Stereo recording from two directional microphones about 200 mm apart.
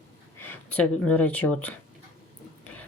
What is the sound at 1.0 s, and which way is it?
Speech, 10° left (ahead or behind).